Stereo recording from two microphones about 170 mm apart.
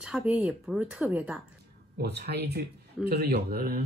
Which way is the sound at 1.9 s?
75° right (ahead or behind).